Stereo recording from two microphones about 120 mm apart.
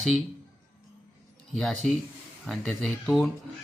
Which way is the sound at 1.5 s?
5° left (ahead or behind).